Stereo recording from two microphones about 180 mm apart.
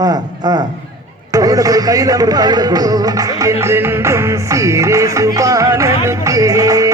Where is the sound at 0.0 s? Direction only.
20° right (ahead or behind).